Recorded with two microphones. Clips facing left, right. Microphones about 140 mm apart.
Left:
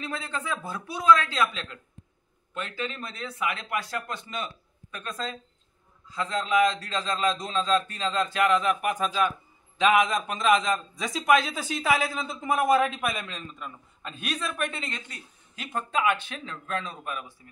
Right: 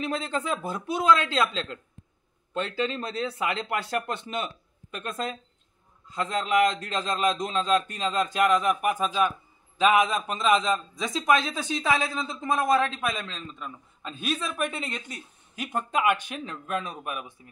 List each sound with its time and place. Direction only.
0.0 s a man's voice: 15° right (ahead or behind)
6.0 s a man's voice: 15° right (ahead or behind)